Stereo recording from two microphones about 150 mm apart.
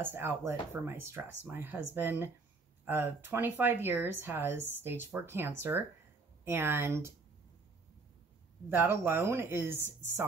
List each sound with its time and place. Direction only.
0.0 s speech: 15° right (ahead or behind)
8.6 s speech: 15° right (ahead or behind)